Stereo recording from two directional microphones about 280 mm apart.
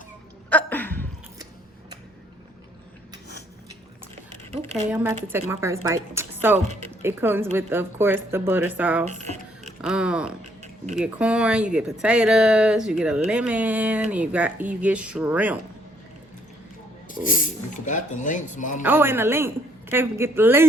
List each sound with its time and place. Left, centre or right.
0.5 s a sound: centre
4.5 s speech: right
4.9 s a woman's voice: centre
9.0 s a sound: right
9.8 s speech: centre
17.7 s speech: left
18.8 s a woman's voice: centre